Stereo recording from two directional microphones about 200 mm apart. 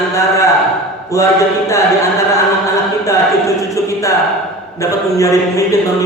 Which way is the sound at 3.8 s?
15° left (ahead or behind).